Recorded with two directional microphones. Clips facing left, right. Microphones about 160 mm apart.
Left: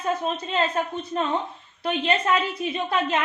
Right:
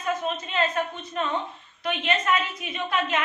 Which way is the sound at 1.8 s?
30° left (ahead or behind).